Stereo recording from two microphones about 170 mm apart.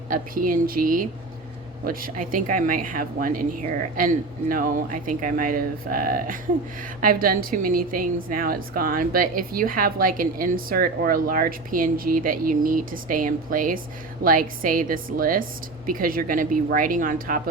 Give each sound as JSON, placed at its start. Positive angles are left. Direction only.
{"t": 0.1, "sound": "a woman's voice", "side_deg": -55}